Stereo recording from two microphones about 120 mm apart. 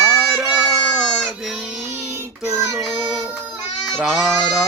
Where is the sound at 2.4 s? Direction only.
20° right (ahead or behind).